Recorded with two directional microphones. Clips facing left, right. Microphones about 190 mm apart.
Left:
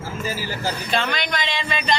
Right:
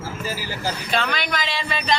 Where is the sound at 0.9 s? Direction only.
Centre (ahead or behind).